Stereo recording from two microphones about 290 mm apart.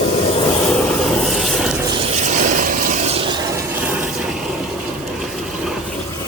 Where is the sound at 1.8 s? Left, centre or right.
Centre.